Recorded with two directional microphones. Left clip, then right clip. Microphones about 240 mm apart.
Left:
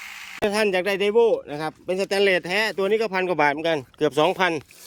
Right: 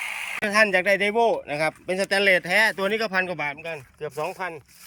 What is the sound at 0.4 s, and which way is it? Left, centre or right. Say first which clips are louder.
Speech: right 2 dB; centre.